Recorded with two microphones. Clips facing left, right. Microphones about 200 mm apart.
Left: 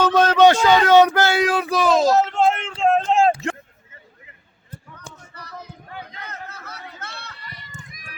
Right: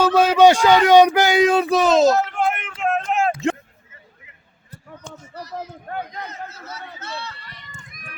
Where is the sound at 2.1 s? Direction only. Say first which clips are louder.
Left 3 dB; 25° left (ahead or behind).